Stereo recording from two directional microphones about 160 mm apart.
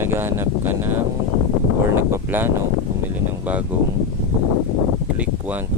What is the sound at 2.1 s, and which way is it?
Speech, 15° right (ahead or behind).